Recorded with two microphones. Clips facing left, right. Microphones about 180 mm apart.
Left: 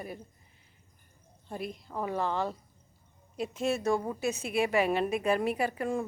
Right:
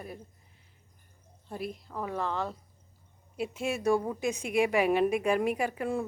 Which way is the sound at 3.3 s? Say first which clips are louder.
Left 2 dB; 10° right (ahead or behind).